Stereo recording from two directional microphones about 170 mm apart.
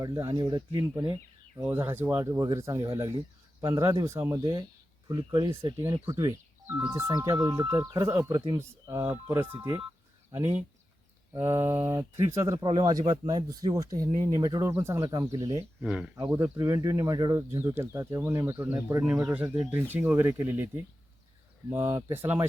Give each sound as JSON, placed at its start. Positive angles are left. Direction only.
{"t": 0.0, "sound": "speech", "side_deg": -20}
{"t": 11.3, "sound": "speech", "side_deg": -15}
{"t": 15.8, "sound": "speech", "side_deg": -5}